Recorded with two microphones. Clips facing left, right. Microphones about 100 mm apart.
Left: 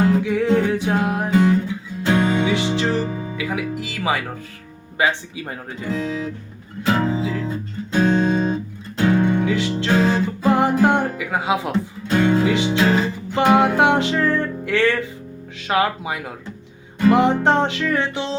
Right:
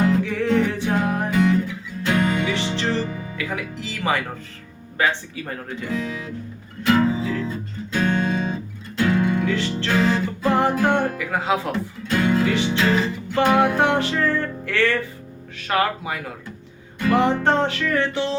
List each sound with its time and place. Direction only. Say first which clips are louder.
0.2 s music: left 2 dB; 15° left (ahead or behind)
1.3 s music: left 4 dB; 25° left (ahead or behind)
3.3 s speech: left 4 dB; 10° left (ahead or behind)
5.9 s music: left 4 dB; 30° left (ahead or behind)
7.2 s music: left 1 dB; 15° left (ahead or behind)
7.9 s music: left 4 dB; 25° left (ahead or behind)
12.0 s music: left 2 dB; 25° left (ahead or behind)
15.5 s speech: left 2 dB; 15° left (ahead or behind)
17.0 s music: left 3 dB; 20° left (ahead or behind)